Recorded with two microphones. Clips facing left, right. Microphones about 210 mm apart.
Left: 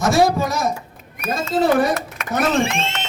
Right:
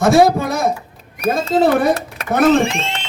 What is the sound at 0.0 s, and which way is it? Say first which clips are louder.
Speech: right 4 dB; 55° right (ahead or behind).